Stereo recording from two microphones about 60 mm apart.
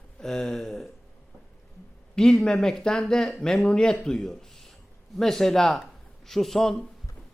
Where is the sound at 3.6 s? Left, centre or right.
Centre.